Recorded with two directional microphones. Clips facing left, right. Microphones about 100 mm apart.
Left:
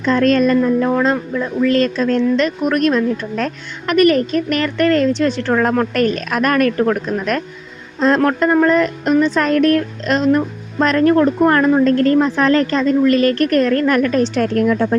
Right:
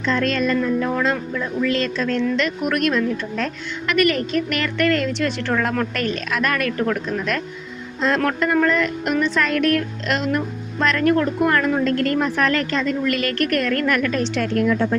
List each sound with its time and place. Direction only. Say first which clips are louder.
0.0 s speech: left 7 dB; 45° left (ahead or behind)